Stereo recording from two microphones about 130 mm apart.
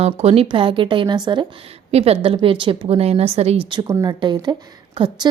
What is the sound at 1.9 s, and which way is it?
Speech, 50° right (ahead or behind).